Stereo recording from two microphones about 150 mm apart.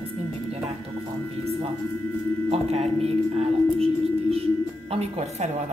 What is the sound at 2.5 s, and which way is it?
Speech, 45° right (ahead or behind).